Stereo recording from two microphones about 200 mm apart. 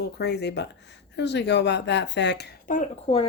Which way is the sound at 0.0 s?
55° left (ahead or behind).